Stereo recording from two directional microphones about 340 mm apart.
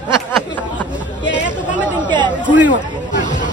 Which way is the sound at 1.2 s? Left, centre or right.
Left.